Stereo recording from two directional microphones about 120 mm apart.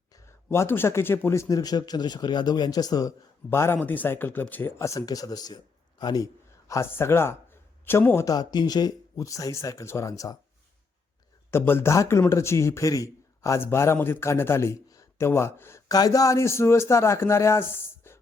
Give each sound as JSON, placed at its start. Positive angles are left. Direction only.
{"t": 0.1, "sound": "a sound", "side_deg": 25}
{"t": 0.5, "sound": "a man's voice", "side_deg": 20}
{"t": 8.3, "sound": "speech", "side_deg": 35}
{"t": 11.5, "sound": "speech", "side_deg": 20}
{"t": 15.9, "sound": "speech", "side_deg": 30}